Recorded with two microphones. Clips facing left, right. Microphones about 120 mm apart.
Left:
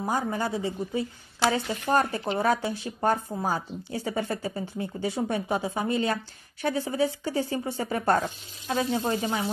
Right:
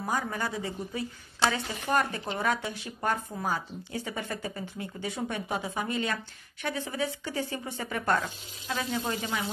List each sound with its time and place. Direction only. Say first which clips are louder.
0.0 s speech: left 4 dB; 30° left (ahead or behind)